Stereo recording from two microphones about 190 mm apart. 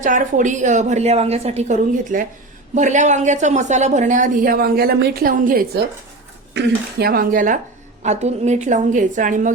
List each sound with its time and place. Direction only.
0.0 s a woman's voice: 45° right (ahead or behind)